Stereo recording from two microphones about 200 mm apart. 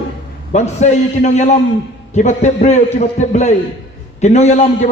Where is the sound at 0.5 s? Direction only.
35° left (ahead or behind).